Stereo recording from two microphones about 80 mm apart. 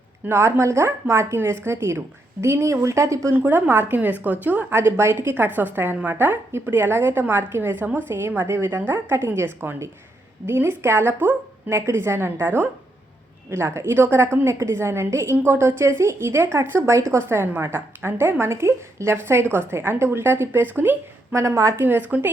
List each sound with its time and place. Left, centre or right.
0.3 s a woman's voice: right
3.3 s a woman's voice: right
21.3 s a woman's voice: right
21.8 s a woman's voice: right